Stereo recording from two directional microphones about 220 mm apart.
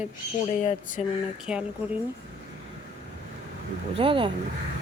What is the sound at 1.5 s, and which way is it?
Speech, 5° right (ahead or behind).